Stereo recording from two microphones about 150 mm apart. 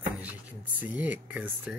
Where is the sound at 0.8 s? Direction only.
10° right (ahead or behind).